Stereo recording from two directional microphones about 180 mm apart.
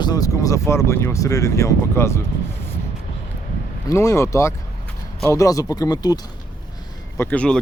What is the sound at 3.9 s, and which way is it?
Speech, 15° left (ahead or behind).